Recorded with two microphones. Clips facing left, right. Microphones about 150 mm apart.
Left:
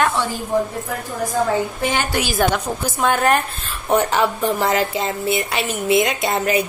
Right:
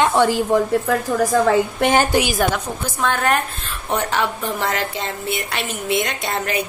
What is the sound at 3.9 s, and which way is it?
A woman's voice, 5° left (ahead or behind).